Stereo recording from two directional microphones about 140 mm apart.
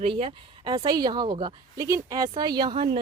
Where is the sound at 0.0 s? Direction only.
45° right (ahead or behind).